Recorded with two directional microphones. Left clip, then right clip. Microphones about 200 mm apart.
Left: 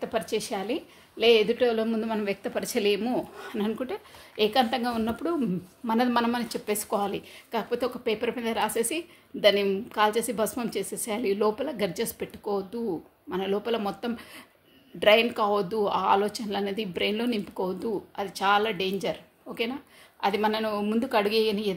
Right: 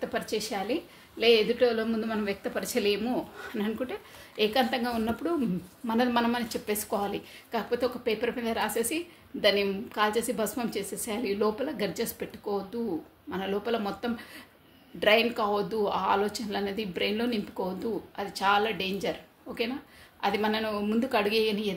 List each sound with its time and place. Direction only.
0.0 s a woman's voice: 45° left (ahead or behind)